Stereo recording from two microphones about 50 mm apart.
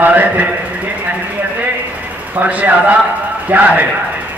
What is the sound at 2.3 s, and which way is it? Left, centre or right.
A man's voice, right.